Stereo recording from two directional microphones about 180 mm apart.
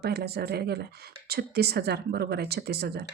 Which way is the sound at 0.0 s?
60° right (ahead or behind).